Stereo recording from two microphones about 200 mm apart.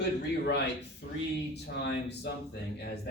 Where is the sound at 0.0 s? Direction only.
55° left (ahead or behind).